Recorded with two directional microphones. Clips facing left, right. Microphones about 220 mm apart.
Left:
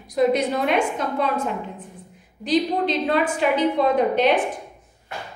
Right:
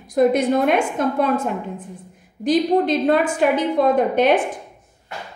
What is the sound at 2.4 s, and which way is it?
A woman's voice, 50° right (ahead or behind).